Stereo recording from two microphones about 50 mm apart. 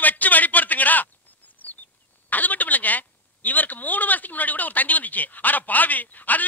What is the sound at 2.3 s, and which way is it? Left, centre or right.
A man's voice, left.